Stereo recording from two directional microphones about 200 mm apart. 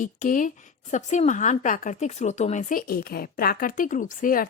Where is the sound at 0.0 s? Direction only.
40° left (ahead or behind).